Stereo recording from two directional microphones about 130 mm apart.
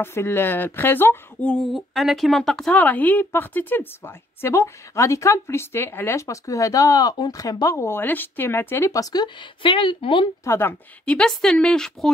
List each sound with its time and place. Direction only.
0.0 s speech: 20° left (ahead or behind)
1.7 s a woman's voice: centre (ahead or behind); by 10.3 s 40° left (ahead or behind)
10.4 s speech: 15° left (ahead or behind)